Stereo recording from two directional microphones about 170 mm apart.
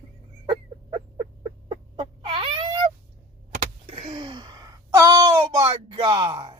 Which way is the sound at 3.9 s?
35° right (ahead or behind).